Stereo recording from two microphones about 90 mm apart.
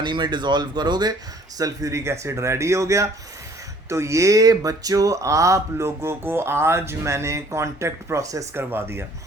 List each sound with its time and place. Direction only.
0.0 s speech: 55° right (ahead or behind)
1.5 s speech: 40° right (ahead or behind)
8.5 s speech: 25° right (ahead or behind)